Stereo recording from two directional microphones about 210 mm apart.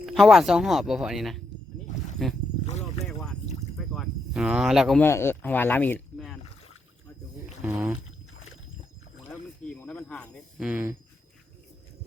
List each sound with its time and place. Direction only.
0.0 s speech: centre (ahead or behind)
1.9 s a sound: 35° left (ahead or behind)
2.6 s boat: 30° left (ahead or behind)
3.0 s boat: centre (ahead or behind)
3.8 s a sound: centre (ahead or behind)
5.0 s speech: 10° left (ahead or behind)
7.6 s rowboat: 5° right (ahead or behind)
9.6 s snake: 10° left (ahead or behind)
10.7 s speech: 10° right (ahead or behind)